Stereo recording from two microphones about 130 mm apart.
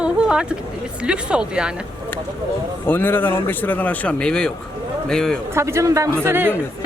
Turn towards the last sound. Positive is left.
turn(degrees=-15)  # may be behind; listen again after turning